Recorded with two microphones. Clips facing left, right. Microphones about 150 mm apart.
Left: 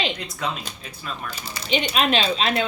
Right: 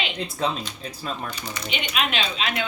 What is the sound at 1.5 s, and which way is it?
A woman's voice, 35° left (ahead or behind).